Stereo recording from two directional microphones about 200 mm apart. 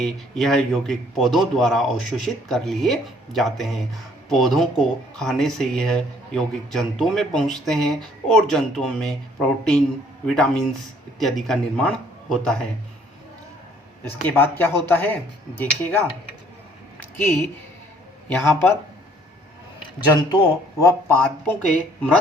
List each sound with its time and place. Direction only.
0.0 s a man's voice: centre (ahead or behind)
10.2 s a man's voice: 5° left (ahead or behind)
14.0 s speech: 10° left (ahead or behind)
17.0 s a sound: 10° left (ahead or behind)
18.3 s speech: 10° left (ahead or behind)
20.1 s speech: 20° left (ahead or behind)